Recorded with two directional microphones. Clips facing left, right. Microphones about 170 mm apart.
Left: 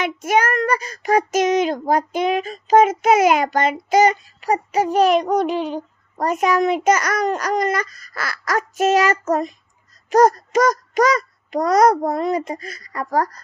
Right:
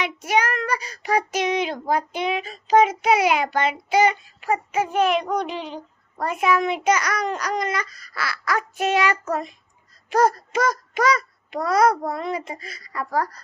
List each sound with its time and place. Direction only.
0.0 s child singing: 45° left (ahead or behind)